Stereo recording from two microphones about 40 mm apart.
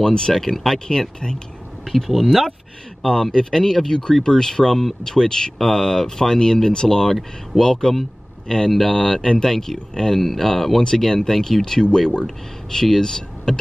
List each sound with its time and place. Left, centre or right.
0.0 s speech: centre